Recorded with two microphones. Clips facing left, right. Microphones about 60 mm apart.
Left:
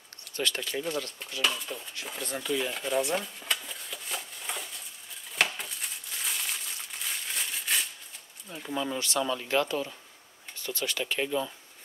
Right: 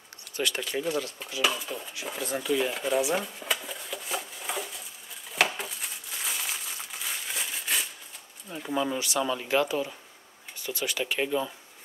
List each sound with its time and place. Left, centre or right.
0.4 s speech: centre
5.6 s crumpling: centre
8.5 s speech: centre